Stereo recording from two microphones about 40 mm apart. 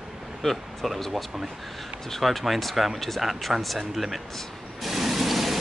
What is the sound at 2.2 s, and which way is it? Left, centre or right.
Speech, centre.